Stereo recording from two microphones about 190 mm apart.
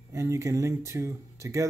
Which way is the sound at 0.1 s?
15° right (ahead or behind).